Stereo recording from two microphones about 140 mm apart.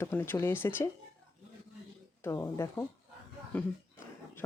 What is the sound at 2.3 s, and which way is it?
A man's voice, 20° left (ahead or behind).